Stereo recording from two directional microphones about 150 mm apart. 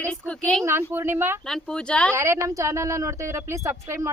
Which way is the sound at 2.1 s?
20° right (ahead or behind).